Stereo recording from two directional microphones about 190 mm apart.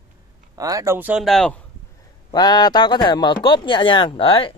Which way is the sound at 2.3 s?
20° left (ahead or behind).